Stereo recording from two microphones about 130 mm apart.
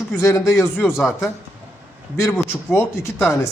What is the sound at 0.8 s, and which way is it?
Speech, 20° left (ahead or behind).